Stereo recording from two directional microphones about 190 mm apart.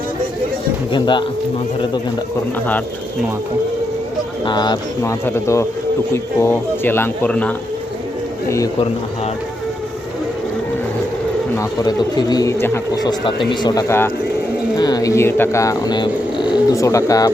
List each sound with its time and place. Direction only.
0.9 s speech: 25° left (ahead or behind)
4.4 s speech: 25° left (ahead or behind)
11.5 s speech: 20° left (ahead or behind)